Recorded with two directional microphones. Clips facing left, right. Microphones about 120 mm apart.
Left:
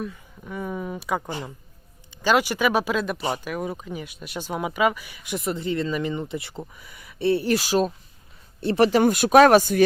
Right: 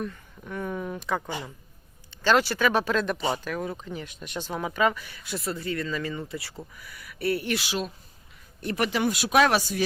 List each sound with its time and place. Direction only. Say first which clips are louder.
0.0 s speech: left 1 dB; 5° left (ahead or behind)
2.2 s speech: left 1 dB; 15° left (ahead or behind)
7.5 s speech: left 8 dB; 40° left (ahead or behind)